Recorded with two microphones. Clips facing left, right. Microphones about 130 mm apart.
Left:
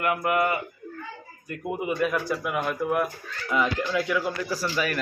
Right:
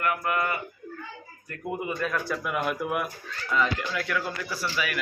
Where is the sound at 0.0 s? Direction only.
20° left (ahead or behind); by 3.1 s 5° right (ahead or behind).